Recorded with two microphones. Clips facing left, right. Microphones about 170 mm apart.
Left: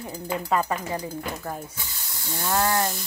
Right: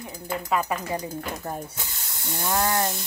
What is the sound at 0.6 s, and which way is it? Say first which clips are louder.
Speech: even; 20° right (ahead or behind).